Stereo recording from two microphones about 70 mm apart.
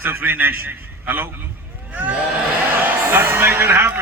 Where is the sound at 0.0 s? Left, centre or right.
Right.